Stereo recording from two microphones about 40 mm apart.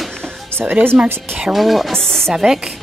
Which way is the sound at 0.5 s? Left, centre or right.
Right.